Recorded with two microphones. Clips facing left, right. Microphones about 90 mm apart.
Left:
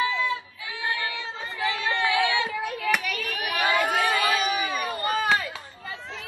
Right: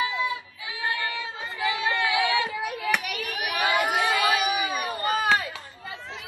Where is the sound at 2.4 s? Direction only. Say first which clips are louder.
Left 1 dB; 15° right (ahead or behind).